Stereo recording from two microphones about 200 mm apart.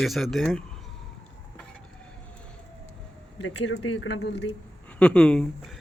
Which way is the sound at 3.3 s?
70° left (ahead or behind).